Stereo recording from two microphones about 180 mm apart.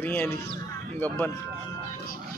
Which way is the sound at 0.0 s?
10° left (ahead or behind).